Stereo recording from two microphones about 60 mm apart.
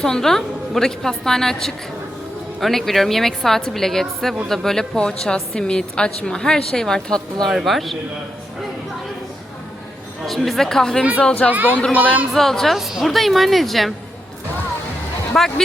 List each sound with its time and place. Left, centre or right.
0.0 s a woman's voice: centre
10.2 s a woman's voice: centre
11.5 s speech: right
12.3 s a woman's voice: centre
15.4 s a woman's voice: centre